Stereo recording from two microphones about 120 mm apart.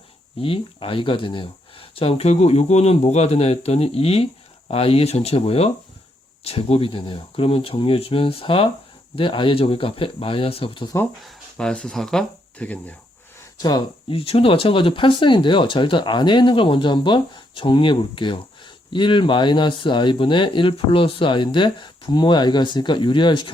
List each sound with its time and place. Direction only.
0.3 s speech: 50° left (ahead or behind)
11.2 s speech: 5° left (ahead or behind)
13.6 s speech: 35° left (ahead or behind)
14.1 s speech: 50° left (ahead or behind)